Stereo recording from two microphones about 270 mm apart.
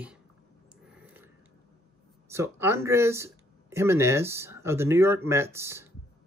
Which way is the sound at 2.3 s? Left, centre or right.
Centre.